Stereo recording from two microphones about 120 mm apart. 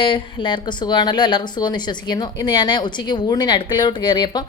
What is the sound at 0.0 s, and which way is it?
A woman's voice, 40° left (ahead or behind).